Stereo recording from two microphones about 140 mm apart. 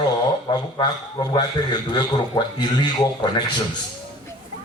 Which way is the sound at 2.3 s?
25° left (ahead or behind).